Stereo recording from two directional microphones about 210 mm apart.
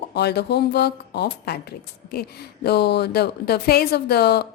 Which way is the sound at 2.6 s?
50° left (ahead or behind).